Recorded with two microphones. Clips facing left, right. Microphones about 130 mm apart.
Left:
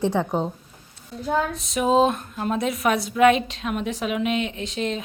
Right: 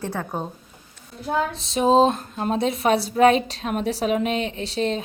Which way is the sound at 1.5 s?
30° right (ahead or behind).